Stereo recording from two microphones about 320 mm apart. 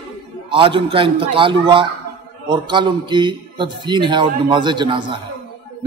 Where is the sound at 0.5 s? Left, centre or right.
Centre.